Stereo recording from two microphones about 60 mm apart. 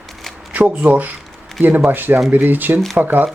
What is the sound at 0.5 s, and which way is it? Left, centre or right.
Speech, right.